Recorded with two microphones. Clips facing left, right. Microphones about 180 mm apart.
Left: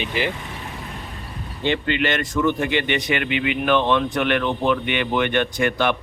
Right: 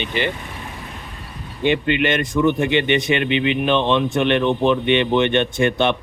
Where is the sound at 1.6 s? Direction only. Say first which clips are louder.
Right 3 dB; 20° right (ahead or behind).